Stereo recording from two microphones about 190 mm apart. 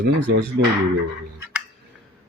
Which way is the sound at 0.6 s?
60° right (ahead or behind).